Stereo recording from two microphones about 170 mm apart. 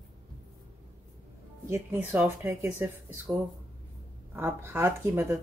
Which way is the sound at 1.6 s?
15° right (ahead or behind).